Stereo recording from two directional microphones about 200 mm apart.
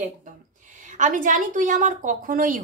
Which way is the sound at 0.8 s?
40° right (ahead or behind).